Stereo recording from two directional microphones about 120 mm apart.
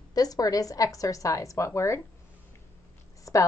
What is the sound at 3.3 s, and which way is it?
Speech, 25° left (ahead or behind).